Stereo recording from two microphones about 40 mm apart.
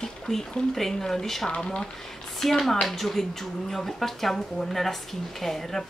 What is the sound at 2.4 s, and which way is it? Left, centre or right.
A woman's voice, centre.